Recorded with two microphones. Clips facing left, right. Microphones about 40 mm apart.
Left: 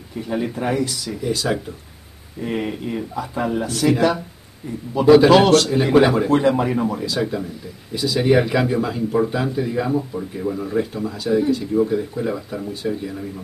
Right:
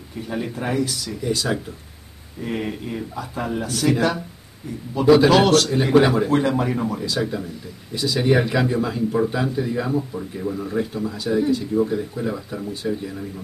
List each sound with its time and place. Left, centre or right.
0.3 s speech: centre